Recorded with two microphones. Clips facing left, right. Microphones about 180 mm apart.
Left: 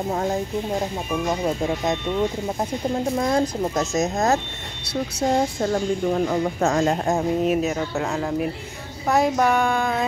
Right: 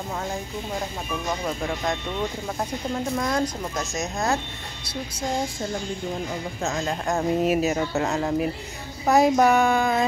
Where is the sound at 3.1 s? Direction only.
25° left (ahead or behind).